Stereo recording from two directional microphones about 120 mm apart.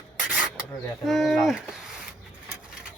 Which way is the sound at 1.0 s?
Centre (ahead or behind).